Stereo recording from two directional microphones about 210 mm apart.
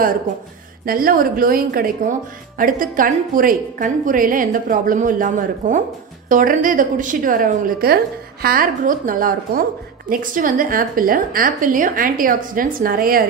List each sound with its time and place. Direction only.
0.8 s a woman's voice: 45° right (ahead or behind)